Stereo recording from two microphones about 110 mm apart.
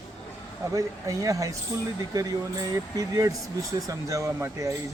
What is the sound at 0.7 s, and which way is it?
Speech, 30° right (ahead or behind).